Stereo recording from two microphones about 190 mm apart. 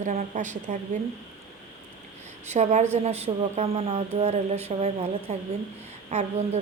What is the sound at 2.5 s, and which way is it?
Speech, 40° right (ahead or behind).